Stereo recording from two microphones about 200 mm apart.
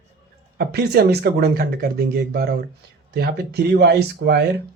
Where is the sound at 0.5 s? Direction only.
50° right (ahead or behind).